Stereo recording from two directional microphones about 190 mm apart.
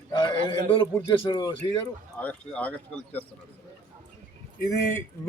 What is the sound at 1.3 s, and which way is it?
Speech, 20° left (ahead or behind).